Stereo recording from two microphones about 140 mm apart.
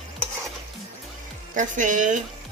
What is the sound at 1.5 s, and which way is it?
Speech, 65° right (ahead or behind).